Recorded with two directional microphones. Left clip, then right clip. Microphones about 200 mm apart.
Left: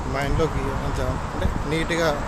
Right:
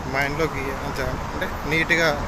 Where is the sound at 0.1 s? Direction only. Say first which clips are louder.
Right 2 dB; 15° left (ahead or behind).